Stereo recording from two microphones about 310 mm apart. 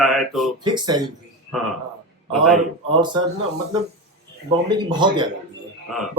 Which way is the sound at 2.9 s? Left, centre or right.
Centre.